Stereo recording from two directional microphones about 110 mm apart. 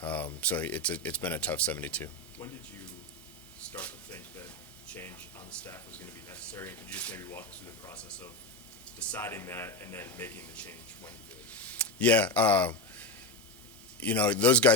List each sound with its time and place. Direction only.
0.0 s a sound: 15° left (ahead or behind)
0.3 s speech: 15° left (ahead or behind)
3.7 s a sound: 15° left (ahead or behind)
4.9 s speech: 20° left (ahead or behind)
5.5 s speech: 10° left (ahead or behind)
5.7 s speech: 25° left (ahead or behind)
7.2 s a man's voice: 25° left (ahead or behind)
9.0 s a man's voice: 15° left (ahead or behind)
11.5 s a sound: 10° left (ahead or behind)
14.0 s speech: 10° left (ahead or behind)